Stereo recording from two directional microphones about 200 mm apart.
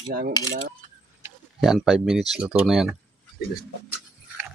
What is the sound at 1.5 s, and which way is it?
Speech, centre (ahead or behind).